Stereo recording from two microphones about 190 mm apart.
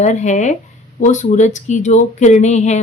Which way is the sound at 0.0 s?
40° left (ahead or behind).